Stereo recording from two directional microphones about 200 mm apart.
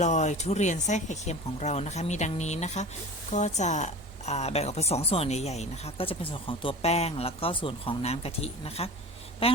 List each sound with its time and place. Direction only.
0.0 s a woman's voice: 35° left (ahead or behind)